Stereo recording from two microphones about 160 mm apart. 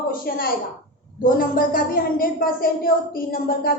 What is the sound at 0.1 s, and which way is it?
A woman's voice, 65° left (ahead or behind).